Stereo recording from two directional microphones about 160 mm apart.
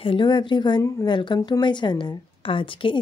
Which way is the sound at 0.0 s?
30° left (ahead or behind).